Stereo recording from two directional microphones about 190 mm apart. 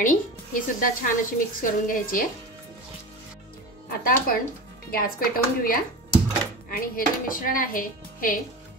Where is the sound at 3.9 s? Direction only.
50° left (ahead or behind).